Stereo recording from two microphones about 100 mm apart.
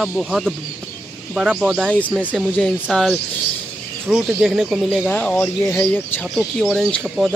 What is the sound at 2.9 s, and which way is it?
Speech, centre (ahead or behind).